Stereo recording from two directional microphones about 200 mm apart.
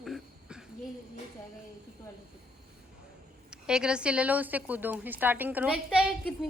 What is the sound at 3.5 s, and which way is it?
A woman's voice, 5° right (ahead or behind).